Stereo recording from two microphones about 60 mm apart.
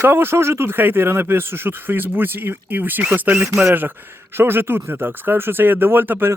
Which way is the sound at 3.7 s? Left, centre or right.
Right.